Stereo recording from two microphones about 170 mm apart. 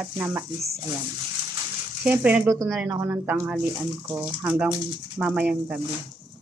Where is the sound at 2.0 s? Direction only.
10° right (ahead or behind).